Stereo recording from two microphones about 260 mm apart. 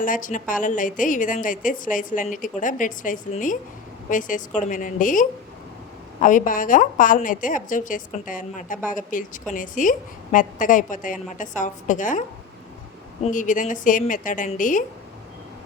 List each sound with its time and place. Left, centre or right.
0.0 s a woman's voice: left
13.3 s a woman's voice: left